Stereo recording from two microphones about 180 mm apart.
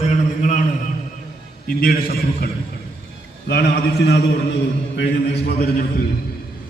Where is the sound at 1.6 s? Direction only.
55° left (ahead or behind).